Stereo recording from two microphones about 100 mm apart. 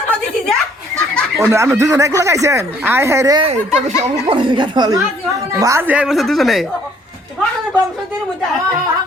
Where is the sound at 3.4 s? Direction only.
90° right.